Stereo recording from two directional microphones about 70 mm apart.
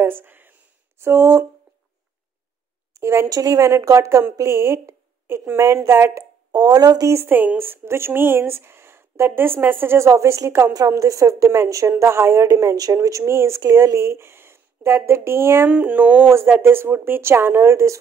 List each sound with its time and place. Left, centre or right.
0.0 s a sound: right
1.0 s speech: right
2.9 s a sound: right
3.3 s speech: right
3.7 s a woman's voice: right
6.5 s speech: right
7.2 s speech: right
13.2 s speech: right
15.7 s speech: right